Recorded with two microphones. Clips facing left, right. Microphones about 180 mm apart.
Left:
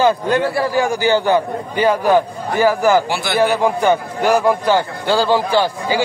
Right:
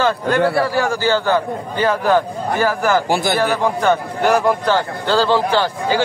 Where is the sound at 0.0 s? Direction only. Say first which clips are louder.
Left 1 dB; 15° left (ahead or behind).